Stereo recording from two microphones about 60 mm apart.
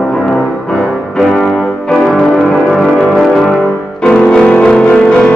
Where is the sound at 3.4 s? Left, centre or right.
Centre.